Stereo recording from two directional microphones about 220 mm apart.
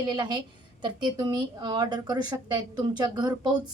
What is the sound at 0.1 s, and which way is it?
A woman's voice, 20° right (ahead or behind).